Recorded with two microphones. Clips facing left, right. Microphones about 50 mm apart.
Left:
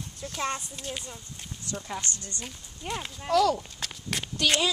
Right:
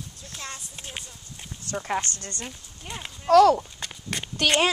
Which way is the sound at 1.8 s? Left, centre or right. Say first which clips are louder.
Right 7 dB; right.